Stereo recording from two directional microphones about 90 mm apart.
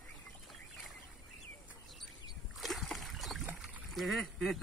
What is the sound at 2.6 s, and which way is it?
Boat, centre (ahead or behind).